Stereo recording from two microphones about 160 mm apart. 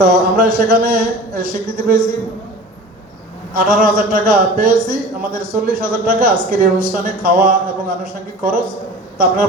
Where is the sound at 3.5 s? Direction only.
60° right (ahead or behind).